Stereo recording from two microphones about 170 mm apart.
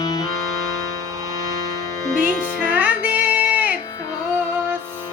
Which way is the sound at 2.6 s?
10° right (ahead or behind).